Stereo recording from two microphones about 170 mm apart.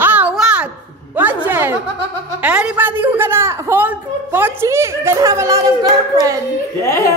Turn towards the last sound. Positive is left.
turn(degrees=15)  # may be behind; listen again after turning